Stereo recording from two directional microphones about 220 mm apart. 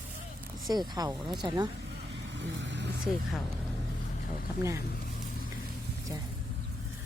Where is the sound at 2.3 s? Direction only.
55° right (ahead or behind).